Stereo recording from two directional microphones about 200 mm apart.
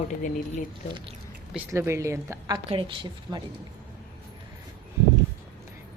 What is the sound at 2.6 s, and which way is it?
Speech, 25° right (ahead or behind).